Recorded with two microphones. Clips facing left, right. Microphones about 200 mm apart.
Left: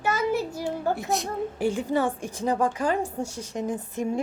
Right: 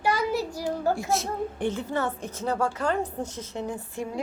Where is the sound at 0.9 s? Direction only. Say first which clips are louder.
Even; centre (ahead or behind).